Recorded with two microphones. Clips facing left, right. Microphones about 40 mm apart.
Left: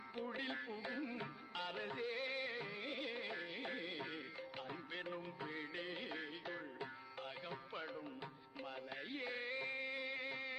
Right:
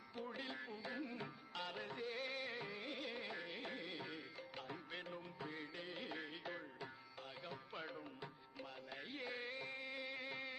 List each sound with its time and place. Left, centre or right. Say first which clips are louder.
0.3 s music: left 4 dB; left
0.9 s music of bollywood: left 1 dB; centre
3.7 s music: left 3 dB; centre
5.7 s music of bollywood: left 4 dB; left
6.0 s music: left 2 dB; centre
7.4 s music: left 3 dB; centre
7.8 s music: left 1 dB; centre
8.2 s music: left 3 dB; centre